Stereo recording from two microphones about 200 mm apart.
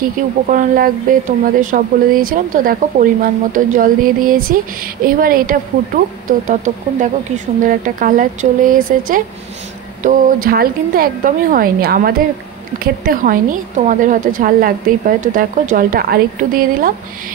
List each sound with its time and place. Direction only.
0.5 s a woman's voice: 45° right (ahead or behind)